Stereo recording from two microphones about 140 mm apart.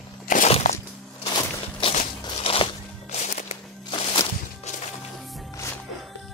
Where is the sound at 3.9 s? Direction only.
45° left (ahead or behind).